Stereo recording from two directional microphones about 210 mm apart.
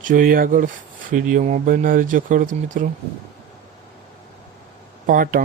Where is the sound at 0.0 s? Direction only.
40° right (ahead or behind).